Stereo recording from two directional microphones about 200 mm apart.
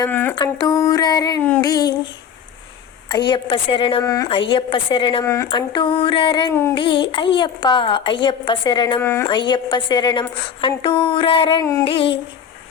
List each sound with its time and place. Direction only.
0.0 s a sound: 10° left (ahead or behind)
0.3 s a woman's voice: 20° left (ahead or behind)
3.2 s a woman's voice: 25° left (ahead or behind)
4.0 s a sound: 15° left (ahead or behind)
4.3 s a woman's voice: 25° left (ahead or behind)
6.7 s a woman's voice: 25° left (ahead or behind)
9.3 s a woman's voice: 25° left (ahead or behind)